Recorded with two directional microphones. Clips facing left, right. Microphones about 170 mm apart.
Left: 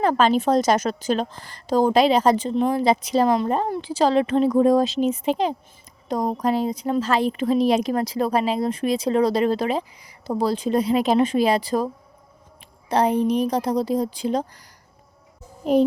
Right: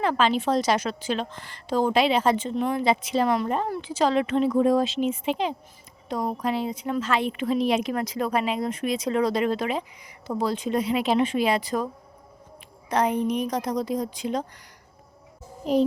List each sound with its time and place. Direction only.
0.0 s a woman's voice: 45° left (ahead or behind)
3.2 s a woman's voice: 30° left (ahead or behind)
12.9 s a woman's voice: 30° left (ahead or behind)
15.6 s a child's voice: 50° left (ahead or behind)